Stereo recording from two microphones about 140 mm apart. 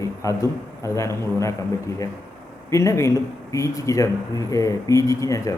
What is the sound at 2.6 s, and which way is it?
A man's voice, 20° left (ahead or behind).